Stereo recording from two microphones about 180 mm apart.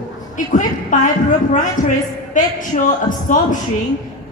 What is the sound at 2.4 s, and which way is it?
A woman's voice, 45° left (ahead or behind).